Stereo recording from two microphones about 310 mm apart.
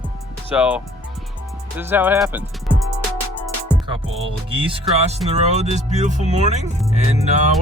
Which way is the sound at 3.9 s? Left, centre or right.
Centre.